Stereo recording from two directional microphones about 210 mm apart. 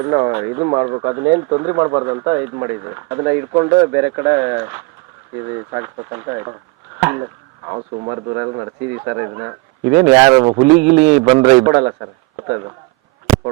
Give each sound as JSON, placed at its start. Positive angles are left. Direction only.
{"t": 0.0, "sound": "speech", "side_deg": -20}
{"t": 7.7, "sound": "a man's voice", "side_deg": -25}